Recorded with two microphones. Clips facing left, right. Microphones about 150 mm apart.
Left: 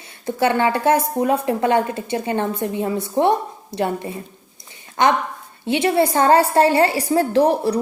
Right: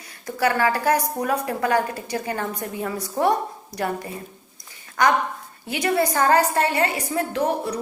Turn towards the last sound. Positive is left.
turn(degrees=35)  # may be behind; listen again after turning